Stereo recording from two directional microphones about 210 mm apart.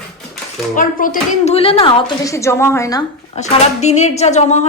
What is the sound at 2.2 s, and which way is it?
Speech, 15° left (ahead or behind).